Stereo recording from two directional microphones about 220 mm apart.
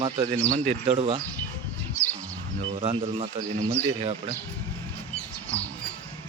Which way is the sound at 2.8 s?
25° right (ahead or behind).